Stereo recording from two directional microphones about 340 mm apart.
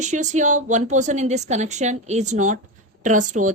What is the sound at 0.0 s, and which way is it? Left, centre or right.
Speech, right.